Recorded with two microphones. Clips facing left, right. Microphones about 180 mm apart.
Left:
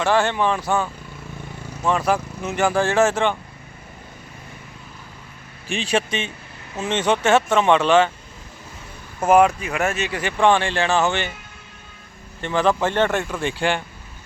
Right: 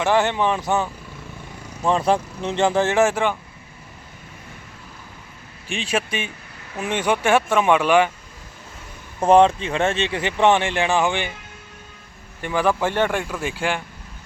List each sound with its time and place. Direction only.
0.0 s speech: 20° right (ahead or behind)
5.6 s a man's voice: centre (ahead or behind)
9.2 s speech: 30° right (ahead or behind)
12.4 s a man's voice: 10° right (ahead or behind)